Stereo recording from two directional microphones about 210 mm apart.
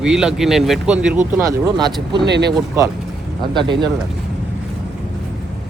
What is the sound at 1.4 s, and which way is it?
Speech, 15° right (ahead or behind).